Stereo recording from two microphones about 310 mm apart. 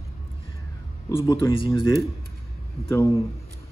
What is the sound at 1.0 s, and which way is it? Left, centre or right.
Speech, centre.